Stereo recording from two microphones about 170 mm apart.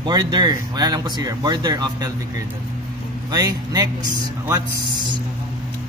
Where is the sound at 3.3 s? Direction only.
25° right (ahead or behind).